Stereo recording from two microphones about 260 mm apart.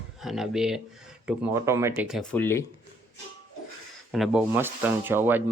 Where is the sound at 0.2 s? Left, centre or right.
Centre.